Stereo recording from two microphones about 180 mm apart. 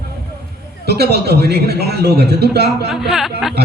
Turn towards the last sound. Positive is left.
turn(degrees=0)  # may be behind; listen again after turning